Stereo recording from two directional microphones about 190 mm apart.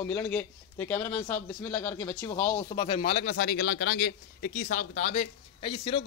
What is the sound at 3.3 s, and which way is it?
Speech, 55° left (ahead or behind).